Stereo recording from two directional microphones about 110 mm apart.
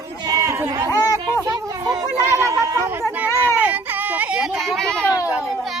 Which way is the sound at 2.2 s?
25° right (ahead or behind).